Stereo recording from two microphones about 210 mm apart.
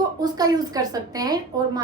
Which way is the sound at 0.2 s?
20° right (ahead or behind).